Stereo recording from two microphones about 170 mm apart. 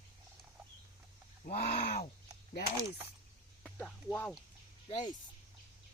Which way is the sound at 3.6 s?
5° left (ahead or behind).